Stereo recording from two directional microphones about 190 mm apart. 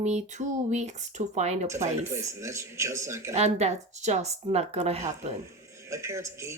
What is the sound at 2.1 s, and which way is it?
A man's voice, 15° right (ahead or behind).